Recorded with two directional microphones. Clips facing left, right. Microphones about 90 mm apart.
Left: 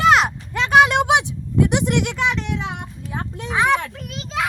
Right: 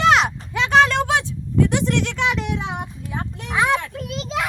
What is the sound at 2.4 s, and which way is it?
Child singing, 20° right (ahead or behind).